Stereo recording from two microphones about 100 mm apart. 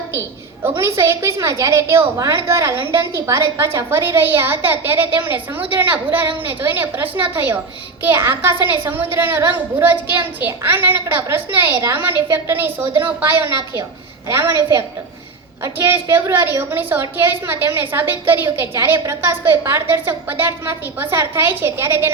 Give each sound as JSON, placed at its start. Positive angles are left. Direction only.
{"t": 0.6, "sound": "a woman's voice", "side_deg": -25}